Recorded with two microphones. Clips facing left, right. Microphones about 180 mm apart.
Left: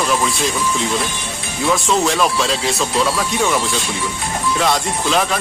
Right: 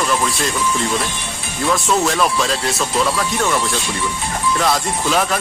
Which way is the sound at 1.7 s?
Centre (ahead or behind).